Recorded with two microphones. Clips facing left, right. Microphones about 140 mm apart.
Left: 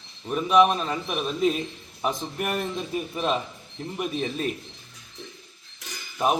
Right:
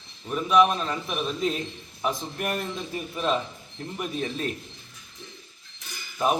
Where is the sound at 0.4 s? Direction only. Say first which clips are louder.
Left 1 dB; 15° left (ahead or behind).